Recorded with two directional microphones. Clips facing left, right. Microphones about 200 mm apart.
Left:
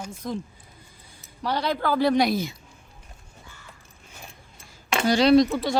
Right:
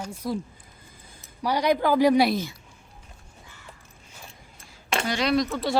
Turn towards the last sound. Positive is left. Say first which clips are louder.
# left 7 dB
turn(degrees=30)  # may be behind; listen again after turning